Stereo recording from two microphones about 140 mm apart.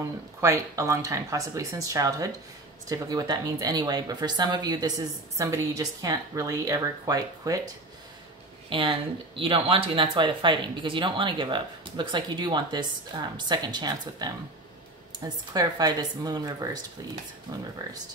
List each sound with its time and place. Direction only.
0.4 s speech: 20° right (ahead or behind)
8.6 s speech: 40° right (ahead or behind)